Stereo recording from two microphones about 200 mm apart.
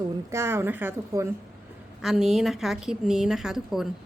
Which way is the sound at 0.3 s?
15° right (ahead or behind).